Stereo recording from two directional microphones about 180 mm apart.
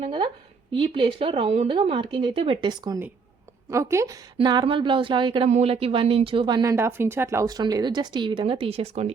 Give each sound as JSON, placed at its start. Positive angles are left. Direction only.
{"t": 0.0, "sound": "a woman's voice", "side_deg": -30}
{"t": 4.4, "sound": "speech", "side_deg": -25}